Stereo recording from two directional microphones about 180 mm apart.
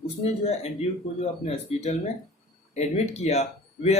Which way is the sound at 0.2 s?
35° left (ahead or behind).